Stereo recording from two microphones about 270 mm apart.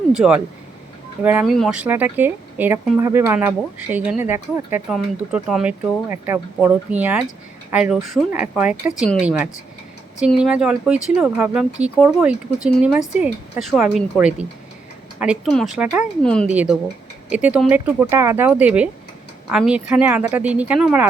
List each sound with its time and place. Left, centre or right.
0.1 s speech: centre